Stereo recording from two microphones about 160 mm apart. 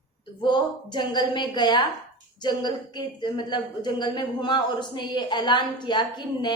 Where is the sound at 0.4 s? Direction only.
30° left (ahead or behind).